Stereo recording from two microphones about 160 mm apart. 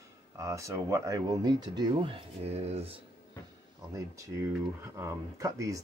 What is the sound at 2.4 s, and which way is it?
Speech, 40° right (ahead or behind).